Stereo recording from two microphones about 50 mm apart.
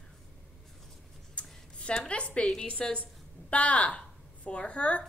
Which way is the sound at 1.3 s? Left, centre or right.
Left.